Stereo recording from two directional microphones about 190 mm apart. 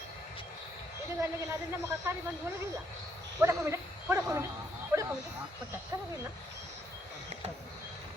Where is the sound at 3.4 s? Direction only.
15° right (ahead or behind).